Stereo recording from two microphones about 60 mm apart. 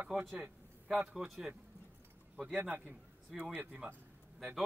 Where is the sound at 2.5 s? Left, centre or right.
Right.